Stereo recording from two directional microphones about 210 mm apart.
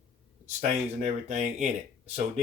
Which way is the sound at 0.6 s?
35° right (ahead or behind).